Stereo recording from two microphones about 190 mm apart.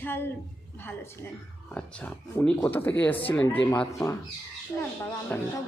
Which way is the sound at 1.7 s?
10° left (ahead or behind).